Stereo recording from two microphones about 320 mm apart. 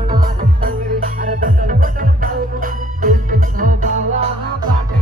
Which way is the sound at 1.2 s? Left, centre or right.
Right.